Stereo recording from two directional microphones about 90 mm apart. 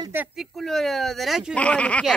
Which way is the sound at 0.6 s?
5° left (ahead or behind).